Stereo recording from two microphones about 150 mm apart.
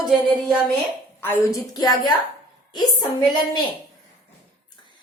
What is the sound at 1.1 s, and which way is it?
A woman's voice, 15° left (ahead or behind).